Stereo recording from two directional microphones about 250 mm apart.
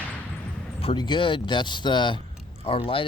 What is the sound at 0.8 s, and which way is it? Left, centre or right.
A man's voice, centre.